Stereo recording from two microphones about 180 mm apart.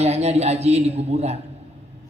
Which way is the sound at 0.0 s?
35° right (ahead or behind).